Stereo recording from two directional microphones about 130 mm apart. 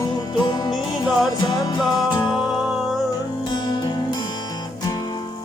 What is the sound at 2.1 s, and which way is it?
Music, 35° left (ahead or behind).